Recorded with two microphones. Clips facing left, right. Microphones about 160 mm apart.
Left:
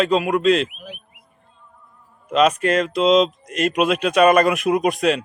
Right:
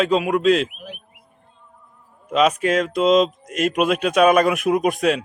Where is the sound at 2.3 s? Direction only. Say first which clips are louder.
Left 1 dB; centre (ahead or behind).